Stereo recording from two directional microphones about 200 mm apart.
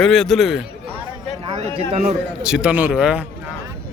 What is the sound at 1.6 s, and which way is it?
Speech, 35° right (ahead or behind).